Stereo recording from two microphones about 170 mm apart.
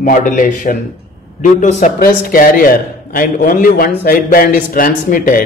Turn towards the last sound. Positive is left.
turn(degrees=55)  # may be behind; listen again after turning